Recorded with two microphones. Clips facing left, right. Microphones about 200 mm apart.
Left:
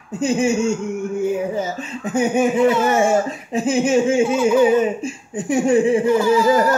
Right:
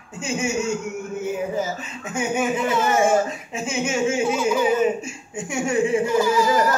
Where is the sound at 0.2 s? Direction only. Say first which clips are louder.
Left 8 dB; 35° left (ahead or behind).